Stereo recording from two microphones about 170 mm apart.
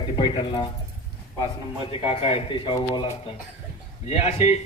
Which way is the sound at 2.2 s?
30° left (ahead or behind).